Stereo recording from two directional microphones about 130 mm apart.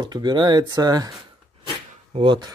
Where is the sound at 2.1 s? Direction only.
35° right (ahead or behind).